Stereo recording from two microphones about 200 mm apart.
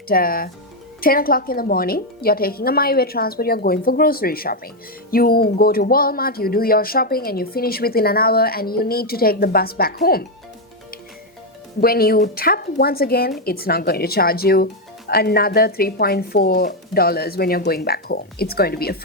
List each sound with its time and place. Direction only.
0.1 s speech: 45° left (ahead or behind)
11.8 s speech: 50° left (ahead or behind)